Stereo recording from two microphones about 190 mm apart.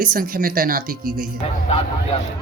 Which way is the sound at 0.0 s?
50° right (ahead or behind).